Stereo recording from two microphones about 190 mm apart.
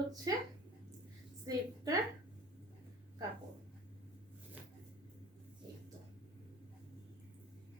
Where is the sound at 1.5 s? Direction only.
20° right (ahead or behind).